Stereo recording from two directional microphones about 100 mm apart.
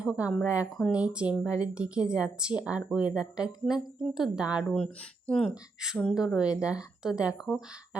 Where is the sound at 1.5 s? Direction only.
35° left (ahead or behind).